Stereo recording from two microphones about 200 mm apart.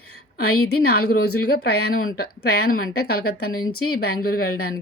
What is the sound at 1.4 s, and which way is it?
A woman's voice, 50° left (ahead or behind).